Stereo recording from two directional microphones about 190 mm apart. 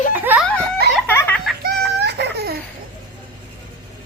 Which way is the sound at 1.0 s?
10° left (ahead or behind).